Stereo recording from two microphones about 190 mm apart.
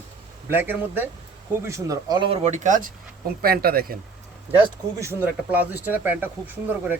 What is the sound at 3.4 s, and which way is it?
Speech, 55° right (ahead or behind).